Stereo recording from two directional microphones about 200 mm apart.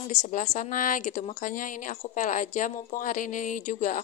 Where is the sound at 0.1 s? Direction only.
35° left (ahead or behind).